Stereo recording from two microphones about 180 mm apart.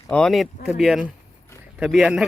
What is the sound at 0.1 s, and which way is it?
A man's voice, 5° left (ahead or behind).